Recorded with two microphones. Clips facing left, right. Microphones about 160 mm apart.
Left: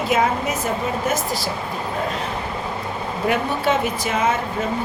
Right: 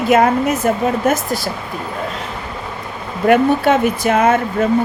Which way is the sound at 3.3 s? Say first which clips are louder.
Right 9 dB; 55° right (ahead or behind).